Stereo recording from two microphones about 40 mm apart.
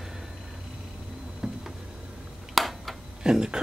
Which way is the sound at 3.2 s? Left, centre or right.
Centre.